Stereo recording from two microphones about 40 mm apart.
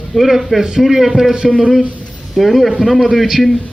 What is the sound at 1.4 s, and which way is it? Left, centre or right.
Speech, right.